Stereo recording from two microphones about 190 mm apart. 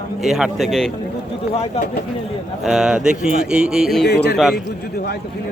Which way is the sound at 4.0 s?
60° left (ahead or behind).